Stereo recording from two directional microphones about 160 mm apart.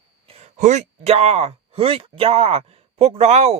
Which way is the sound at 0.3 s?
40° right (ahead or behind).